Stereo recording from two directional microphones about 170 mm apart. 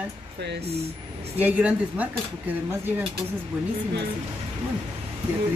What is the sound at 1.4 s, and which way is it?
Speech, 10° right (ahead or behind).